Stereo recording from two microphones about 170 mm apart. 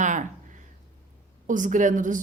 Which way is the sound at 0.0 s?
45° right (ahead or behind).